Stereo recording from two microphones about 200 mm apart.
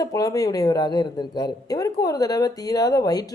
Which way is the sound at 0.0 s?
15° left (ahead or behind).